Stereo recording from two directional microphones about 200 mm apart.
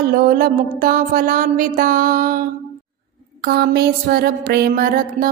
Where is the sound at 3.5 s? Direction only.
50° right (ahead or behind).